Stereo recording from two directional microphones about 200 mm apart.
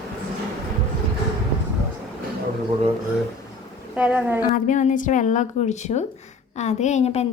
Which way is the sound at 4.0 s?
5° right (ahead or behind).